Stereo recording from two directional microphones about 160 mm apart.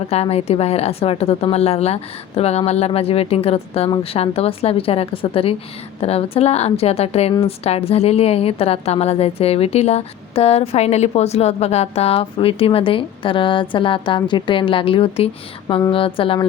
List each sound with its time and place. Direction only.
0.1 s a woman's voice: 40° left (ahead or behind)